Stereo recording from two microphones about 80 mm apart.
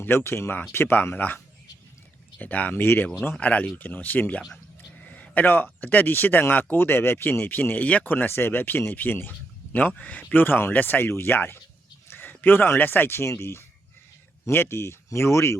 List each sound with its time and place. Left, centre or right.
0.0 s speech: left
2.4 s speech: left
3.3 s speech: centre
4.9 s a sound: centre
5.8 s speech: left